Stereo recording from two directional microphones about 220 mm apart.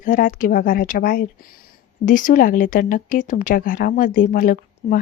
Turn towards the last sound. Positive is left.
turn(degrees=40)  # may be behind; listen again after turning